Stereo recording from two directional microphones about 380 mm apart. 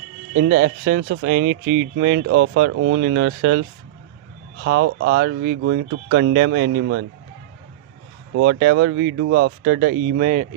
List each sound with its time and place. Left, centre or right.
0.6 s speech: right
8.4 s speech: right
9.7 s speech: right